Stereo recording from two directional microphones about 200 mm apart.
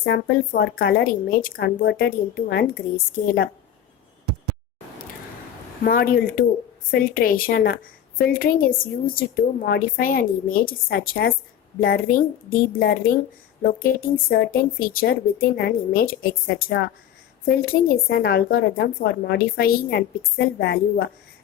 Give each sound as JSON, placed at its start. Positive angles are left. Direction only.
{"t": 0.0, "sound": "speech", "side_deg": 50}
{"t": 5.8, "sound": "speech", "side_deg": 45}